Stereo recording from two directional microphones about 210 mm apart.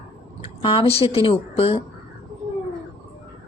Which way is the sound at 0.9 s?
30° left (ahead or behind).